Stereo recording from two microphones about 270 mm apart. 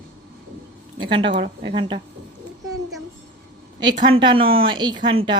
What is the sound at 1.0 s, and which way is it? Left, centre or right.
Speech, centre.